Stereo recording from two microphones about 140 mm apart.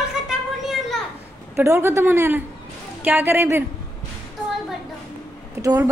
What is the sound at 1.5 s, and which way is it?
Speech, 15° right (ahead or behind).